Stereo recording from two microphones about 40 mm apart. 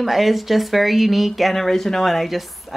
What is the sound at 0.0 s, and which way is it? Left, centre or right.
Speech, centre.